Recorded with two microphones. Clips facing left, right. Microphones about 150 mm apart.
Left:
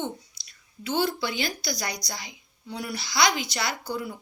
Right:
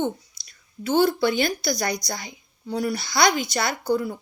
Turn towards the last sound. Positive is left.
turn(degrees=-45)  # may be behind; listen again after turning